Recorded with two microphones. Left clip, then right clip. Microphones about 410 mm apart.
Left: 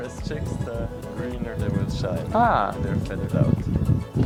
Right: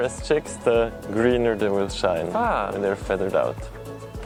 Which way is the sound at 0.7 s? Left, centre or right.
Right.